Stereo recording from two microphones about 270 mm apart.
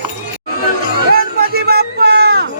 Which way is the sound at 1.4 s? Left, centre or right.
Right.